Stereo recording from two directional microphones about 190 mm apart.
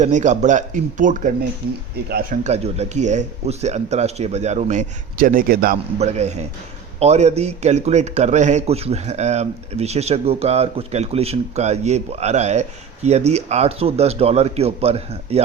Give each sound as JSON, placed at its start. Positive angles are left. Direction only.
{"t": 0.0, "sound": "a man's voice", "side_deg": -40}
{"t": 6.0, "sound": "a man's voice", "side_deg": -35}